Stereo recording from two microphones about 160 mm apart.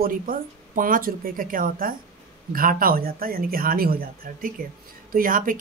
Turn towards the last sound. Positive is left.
turn(degrees=-60)  # may be behind; listen again after turning